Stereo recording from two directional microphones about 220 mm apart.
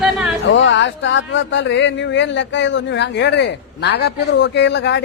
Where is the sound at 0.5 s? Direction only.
55° left (ahead or behind).